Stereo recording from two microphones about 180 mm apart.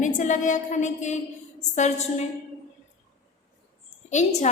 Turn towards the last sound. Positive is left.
turn(degrees=40)  # may be behind; listen again after turning